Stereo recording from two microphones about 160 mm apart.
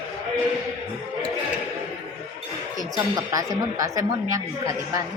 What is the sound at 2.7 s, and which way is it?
A woman's voice, 20° right (ahead or behind).